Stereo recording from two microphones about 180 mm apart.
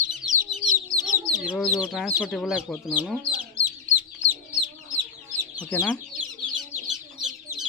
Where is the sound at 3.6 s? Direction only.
40° right (ahead or behind).